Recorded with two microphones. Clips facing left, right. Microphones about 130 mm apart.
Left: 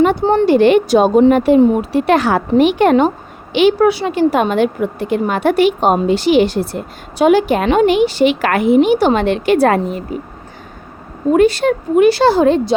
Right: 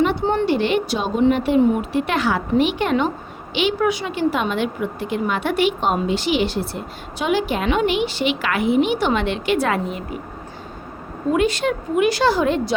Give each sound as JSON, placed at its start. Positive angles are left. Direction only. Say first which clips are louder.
{"t": 0.0, "sound": "speech", "louder": "left 7 dB", "side_deg": 45}
{"t": 0.5, "sound": "a woman's voice", "louder": "left 10 dB", "side_deg": 50}
{"t": 1.5, "sound": "a woman's voice", "louder": "left 5 dB", "side_deg": 35}
{"t": 3.8, "sound": "a woman's voice", "louder": "left 8 dB", "side_deg": 35}
{"t": 11.3, "sound": "a woman's voice", "louder": "left 7 dB", "side_deg": 40}